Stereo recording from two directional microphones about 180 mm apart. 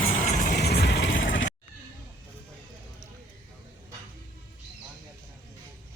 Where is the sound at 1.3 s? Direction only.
90° left.